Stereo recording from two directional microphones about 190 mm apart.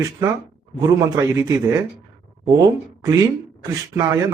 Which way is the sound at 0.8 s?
15° right (ahead or behind).